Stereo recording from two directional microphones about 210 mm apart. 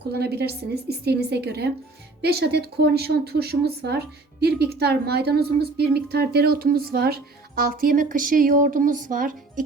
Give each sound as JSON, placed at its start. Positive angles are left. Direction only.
{"t": 0.1, "sound": "speech", "side_deg": -50}